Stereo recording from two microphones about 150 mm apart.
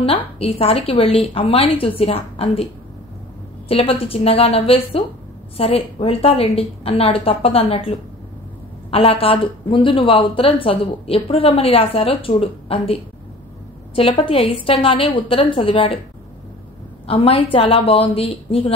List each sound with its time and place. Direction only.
0.4 s speech: 40° left (ahead or behind)
8.9 s speech: 40° left (ahead or behind)
17.0 s speech: 40° left (ahead or behind)